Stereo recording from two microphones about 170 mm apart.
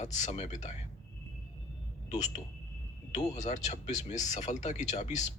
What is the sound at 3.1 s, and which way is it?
Speech, 40° left (ahead or behind).